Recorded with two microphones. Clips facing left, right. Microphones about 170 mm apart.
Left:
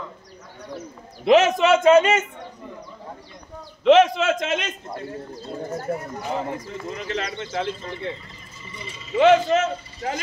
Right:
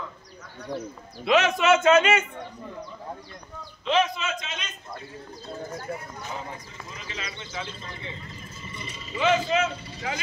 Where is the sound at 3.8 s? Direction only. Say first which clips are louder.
Left 10 dB; 75° left (ahead or behind).